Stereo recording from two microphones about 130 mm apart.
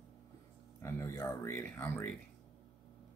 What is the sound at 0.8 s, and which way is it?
Speech, 25° left (ahead or behind).